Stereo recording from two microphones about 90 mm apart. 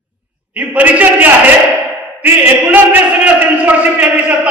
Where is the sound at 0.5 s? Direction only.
15° right (ahead or behind).